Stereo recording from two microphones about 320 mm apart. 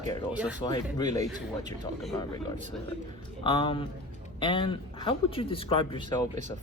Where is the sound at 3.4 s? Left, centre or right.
Centre.